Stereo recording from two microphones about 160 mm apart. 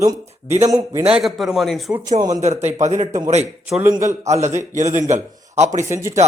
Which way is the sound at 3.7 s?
15° right (ahead or behind).